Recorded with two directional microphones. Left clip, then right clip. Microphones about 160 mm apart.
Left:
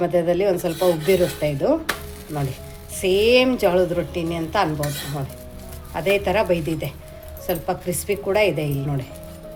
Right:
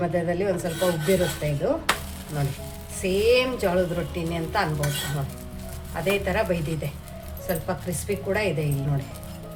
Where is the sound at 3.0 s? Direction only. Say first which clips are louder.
Left 4 dB; 55° left (ahead or behind).